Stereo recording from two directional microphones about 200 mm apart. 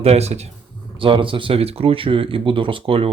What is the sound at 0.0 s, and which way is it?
Speech, 30° right (ahead or behind).